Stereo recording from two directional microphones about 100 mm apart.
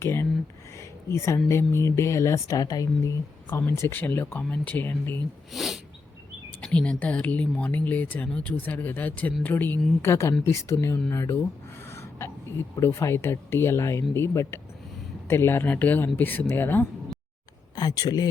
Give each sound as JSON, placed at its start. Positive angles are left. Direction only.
{"t": 0.0, "sound": "speech", "side_deg": 25}
{"t": 0.8, "sound": "a sound", "side_deg": 30}
{"t": 1.5, "sound": "speech", "side_deg": 25}
{"t": 3.7, "sound": "speech", "side_deg": 25}
{"t": 5.5, "sound": "speech", "side_deg": 0}
{"t": 6.6, "sound": "speech", "side_deg": 10}
{"t": 11.9, "sound": "gasp", "side_deg": 25}
{"t": 12.7, "sound": "speech", "side_deg": 25}
{"t": 17.7, "sound": "speech", "side_deg": 40}